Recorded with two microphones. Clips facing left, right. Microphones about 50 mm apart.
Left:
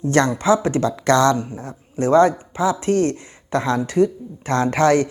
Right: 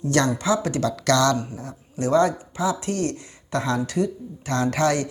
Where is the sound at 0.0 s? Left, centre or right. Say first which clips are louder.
Left 4 dB; left.